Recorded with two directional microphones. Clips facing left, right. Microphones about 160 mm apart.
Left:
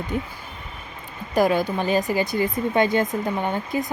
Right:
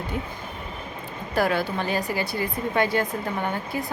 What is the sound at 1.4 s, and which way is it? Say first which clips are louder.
Speech: left 4 dB; 15° left (ahead or behind).